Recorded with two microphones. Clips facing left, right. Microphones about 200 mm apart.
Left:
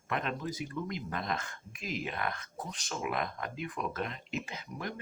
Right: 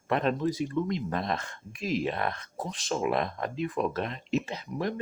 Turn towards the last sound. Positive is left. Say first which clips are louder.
# right 8 dB
turn(degrees=-30)  # may be behind; listen again after turning